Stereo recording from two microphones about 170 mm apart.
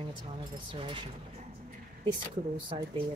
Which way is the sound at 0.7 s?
30° right (ahead or behind).